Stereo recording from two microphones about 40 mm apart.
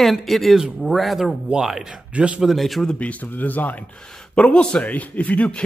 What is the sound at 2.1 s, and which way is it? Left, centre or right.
Speech, right.